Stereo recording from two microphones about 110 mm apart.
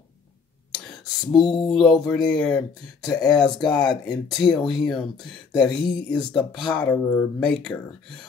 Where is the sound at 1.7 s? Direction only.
Centre (ahead or behind).